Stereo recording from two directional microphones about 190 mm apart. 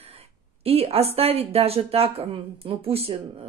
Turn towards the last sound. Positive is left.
turn(degrees=-30)  # may be behind; listen again after turning